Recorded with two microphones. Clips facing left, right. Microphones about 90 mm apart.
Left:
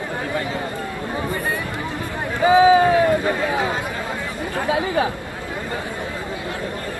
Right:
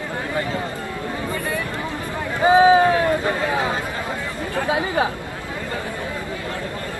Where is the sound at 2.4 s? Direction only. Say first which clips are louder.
Even; 30° right (ahead or behind).